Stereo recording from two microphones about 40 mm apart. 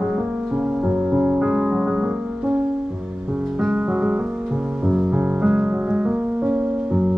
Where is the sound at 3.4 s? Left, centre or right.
Centre.